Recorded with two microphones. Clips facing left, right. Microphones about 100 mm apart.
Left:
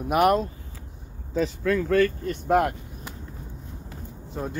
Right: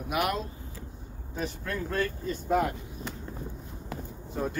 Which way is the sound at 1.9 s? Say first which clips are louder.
Left 6 dB; 75° left (ahead or behind).